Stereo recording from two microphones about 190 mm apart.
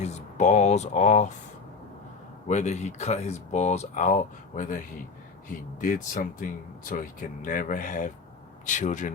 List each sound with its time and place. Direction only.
0.0 s speech: 35° left (ahead or behind)
2.5 s speech: 35° left (ahead or behind)